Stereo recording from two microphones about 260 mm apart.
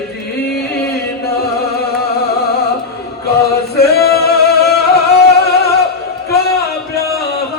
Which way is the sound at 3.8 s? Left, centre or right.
Left.